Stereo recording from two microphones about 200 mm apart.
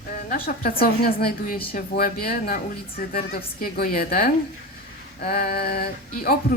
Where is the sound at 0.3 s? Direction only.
45° left (ahead or behind).